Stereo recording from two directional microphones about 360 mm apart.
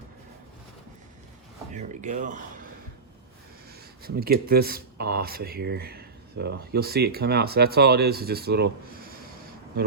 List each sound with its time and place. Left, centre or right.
1.7 s speech: centre
4.0 s speech: right